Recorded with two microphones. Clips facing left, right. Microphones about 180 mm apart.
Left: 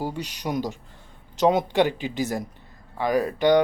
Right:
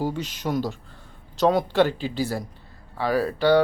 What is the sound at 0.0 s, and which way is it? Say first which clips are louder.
Speech: right 2 dB; 15° left (ahead or behind).